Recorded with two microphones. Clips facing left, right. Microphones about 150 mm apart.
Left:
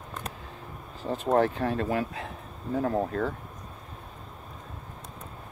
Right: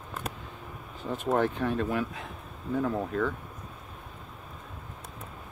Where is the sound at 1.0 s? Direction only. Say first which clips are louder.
Left 3 dB; 35° left (ahead or behind).